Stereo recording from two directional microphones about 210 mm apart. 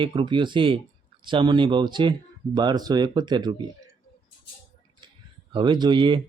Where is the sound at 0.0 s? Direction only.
25° right (ahead or behind).